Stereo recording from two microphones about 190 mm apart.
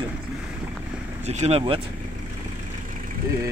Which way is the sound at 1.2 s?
35° right (ahead or behind).